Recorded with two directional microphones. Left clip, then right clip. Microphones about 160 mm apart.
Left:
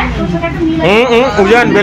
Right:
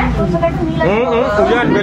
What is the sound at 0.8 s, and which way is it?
Speech, 45° left (ahead or behind).